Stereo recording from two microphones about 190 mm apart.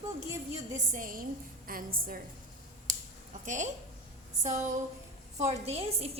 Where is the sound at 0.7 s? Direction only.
45° right (ahead or behind).